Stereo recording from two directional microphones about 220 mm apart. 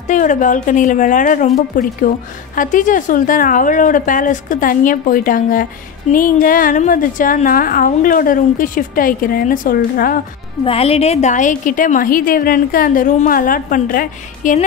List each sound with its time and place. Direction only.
0.1 s a woman's voice: 35° left (ahead or behind)
10.6 s a woman's voice: 25° left (ahead or behind)